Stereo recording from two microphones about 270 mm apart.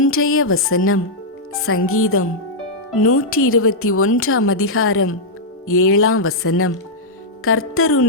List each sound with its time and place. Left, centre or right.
0.0 s a woman's voice: left